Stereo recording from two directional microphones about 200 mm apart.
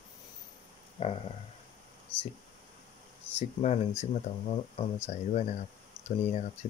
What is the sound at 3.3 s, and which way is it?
Speech, 35° left (ahead or behind).